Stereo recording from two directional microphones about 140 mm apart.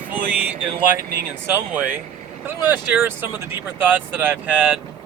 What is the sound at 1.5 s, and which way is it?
Speech, 15° right (ahead or behind).